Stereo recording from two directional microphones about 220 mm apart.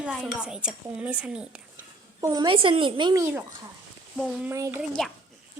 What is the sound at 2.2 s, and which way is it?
A woman's voice, 20° right (ahead or behind).